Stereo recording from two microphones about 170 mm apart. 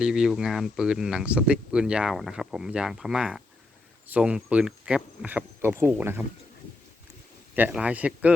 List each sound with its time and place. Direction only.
0.0 s speech: 5° right (ahead or behind)
7.5 s speech: 10° right (ahead or behind)